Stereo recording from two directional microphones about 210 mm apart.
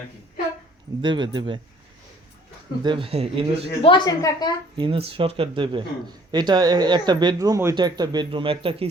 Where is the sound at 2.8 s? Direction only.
25° right (ahead or behind).